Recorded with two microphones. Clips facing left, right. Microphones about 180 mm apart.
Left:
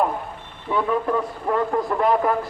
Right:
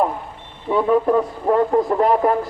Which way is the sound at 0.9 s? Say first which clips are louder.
Right 8 dB; 25° right (ahead or behind).